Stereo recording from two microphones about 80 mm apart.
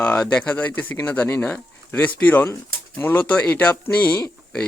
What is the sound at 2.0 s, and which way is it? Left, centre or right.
Speech, centre.